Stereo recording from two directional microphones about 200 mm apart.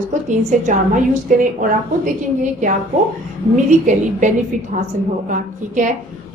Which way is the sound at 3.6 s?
40° right (ahead or behind).